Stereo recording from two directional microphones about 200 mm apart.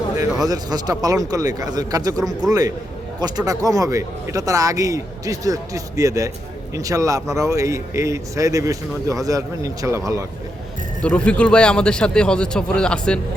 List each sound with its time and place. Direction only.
0.4 s speech: 20° right (ahead or behind)
11.0 s speech: 5° left (ahead or behind)